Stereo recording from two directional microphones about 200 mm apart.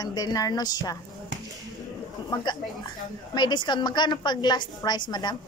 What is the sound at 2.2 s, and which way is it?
Speech, 20° left (ahead or behind).